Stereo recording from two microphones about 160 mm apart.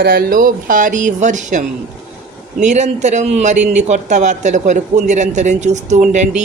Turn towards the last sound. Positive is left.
turn(degrees=-50)  # may be behind; listen again after turning